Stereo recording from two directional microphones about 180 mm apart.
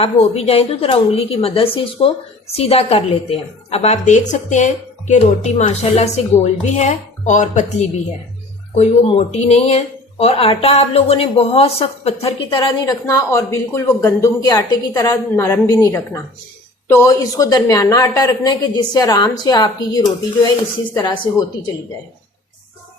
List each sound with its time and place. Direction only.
0.0 s a woman's voice: 35° left (ahead or behind)